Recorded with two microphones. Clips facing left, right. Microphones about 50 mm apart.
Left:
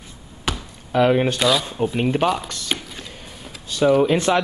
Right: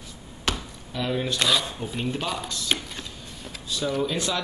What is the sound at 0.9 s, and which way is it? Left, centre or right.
Speech, left.